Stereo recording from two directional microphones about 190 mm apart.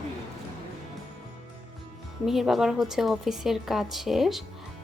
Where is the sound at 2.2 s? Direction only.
Centre (ahead or behind).